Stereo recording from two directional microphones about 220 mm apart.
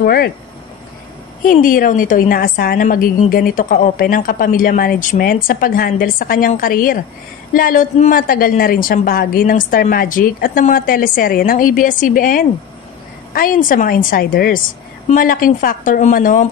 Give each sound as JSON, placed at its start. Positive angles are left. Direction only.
{"t": 0.0, "sound": "speech", "side_deg": 45}
{"t": 1.4, "sound": "a woman's voice", "side_deg": 40}